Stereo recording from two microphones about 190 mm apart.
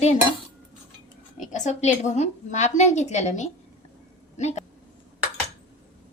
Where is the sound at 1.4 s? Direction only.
40° left (ahead or behind).